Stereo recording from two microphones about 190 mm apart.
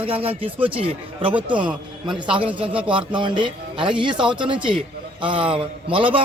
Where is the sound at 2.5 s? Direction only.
30° right (ahead or behind).